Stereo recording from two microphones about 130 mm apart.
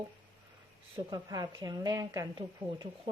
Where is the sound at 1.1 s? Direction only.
30° right (ahead or behind).